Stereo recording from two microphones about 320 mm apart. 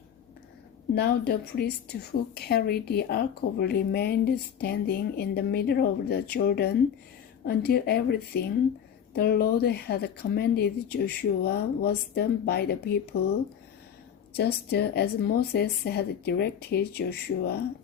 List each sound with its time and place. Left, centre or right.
1.3 s speech: left
14.3 s speech: left